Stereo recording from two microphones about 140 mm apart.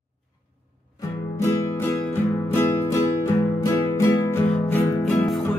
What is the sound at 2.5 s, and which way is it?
Music, 15° left (ahead or behind).